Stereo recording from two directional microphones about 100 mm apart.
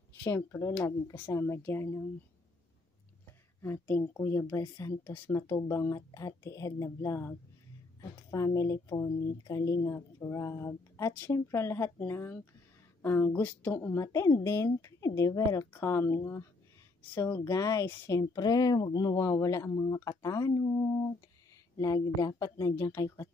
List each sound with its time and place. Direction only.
0.5 s speech: 30° left (ahead or behind)
3.6 s speech: 20° left (ahead or behind)
5.3 s speech: 30° left (ahead or behind)
14.0 s speech: 35° left (ahead or behind)